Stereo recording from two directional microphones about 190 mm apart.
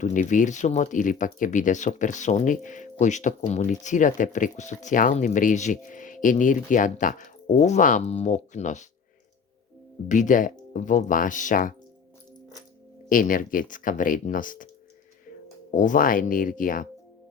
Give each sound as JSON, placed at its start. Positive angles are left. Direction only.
{"t": 0.0, "sound": "speech", "side_deg": 40}
{"t": 10.1, "sound": "speech", "side_deg": 40}
{"t": 13.1, "sound": "speech", "side_deg": 45}
{"t": 15.7, "sound": "speech", "side_deg": 45}